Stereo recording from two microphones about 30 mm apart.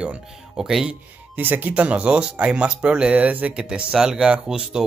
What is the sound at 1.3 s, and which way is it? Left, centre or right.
Speech, right.